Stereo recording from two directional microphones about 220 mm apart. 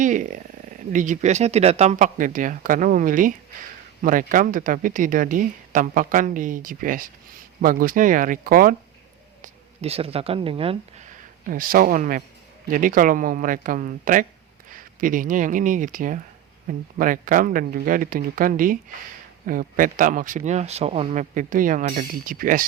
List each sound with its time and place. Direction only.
0.0 s speech: 35° right (ahead or behind)
9.4 s speech: 30° right (ahead or behind)